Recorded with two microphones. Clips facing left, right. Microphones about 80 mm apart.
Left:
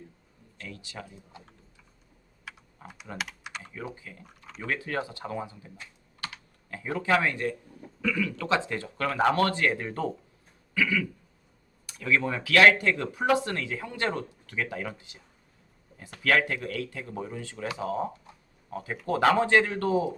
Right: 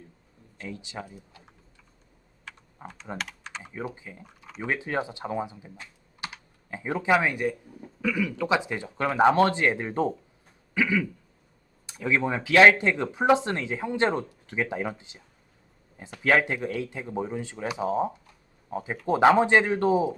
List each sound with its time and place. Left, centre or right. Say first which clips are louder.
0.6 s speech: right 4 dB; right
2.5 s typing: right 2 dB; centre
3.6 s speech: right 6 dB; right
4.2 s speech: right 2 dB; centre
4.6 s speech: right 3 dB; right
10.8 s a sound: right 2 dB; right
11.9 s speech: right 1 dB; right
16.2 s speech: right 2 dB; right